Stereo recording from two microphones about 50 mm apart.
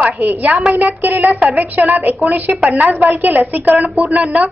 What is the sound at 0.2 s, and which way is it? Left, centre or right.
Speech, right.